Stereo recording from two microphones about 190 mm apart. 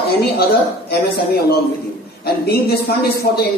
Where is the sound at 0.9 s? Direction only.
55° left (ahead or behind).